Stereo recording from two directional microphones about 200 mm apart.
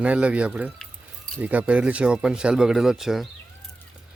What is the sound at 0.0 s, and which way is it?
Speech, 5° right (ahead or behind).